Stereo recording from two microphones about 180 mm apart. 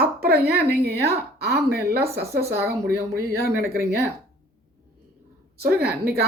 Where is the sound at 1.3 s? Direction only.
60° right (ahead or behind).